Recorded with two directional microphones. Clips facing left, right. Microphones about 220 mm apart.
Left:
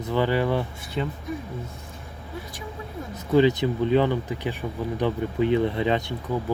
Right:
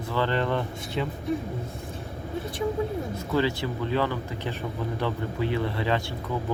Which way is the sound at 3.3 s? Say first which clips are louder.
Left 7 dB; 20° left (ahead or behind).